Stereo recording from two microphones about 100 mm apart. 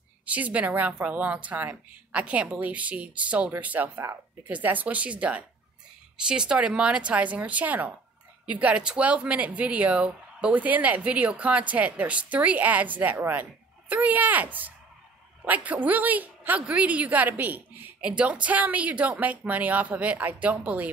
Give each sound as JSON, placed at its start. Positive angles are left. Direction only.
{"t": 0.2, "sound": "speech", "side_deg": -15}